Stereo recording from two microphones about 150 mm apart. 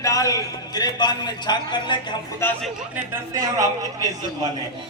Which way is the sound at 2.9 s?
20° right (ahead or behind).